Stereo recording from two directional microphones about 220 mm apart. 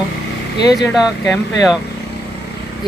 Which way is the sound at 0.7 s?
Centre (ahead or behind).